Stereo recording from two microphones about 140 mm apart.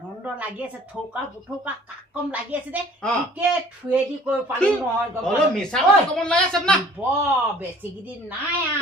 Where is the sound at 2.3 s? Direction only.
10° right (ahead or behind).